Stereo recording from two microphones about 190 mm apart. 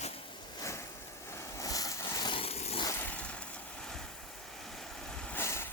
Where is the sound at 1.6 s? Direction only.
20° left (ahead or behind); by 2.8 s 35° left (ahead or behind).